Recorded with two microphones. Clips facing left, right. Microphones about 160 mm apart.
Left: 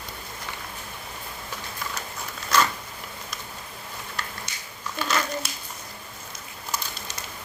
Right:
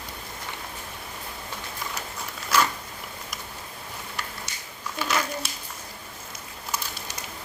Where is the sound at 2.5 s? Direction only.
10° right (ahead or behind).